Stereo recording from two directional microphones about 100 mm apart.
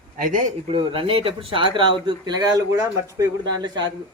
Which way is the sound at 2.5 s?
35° right (ahead or behind).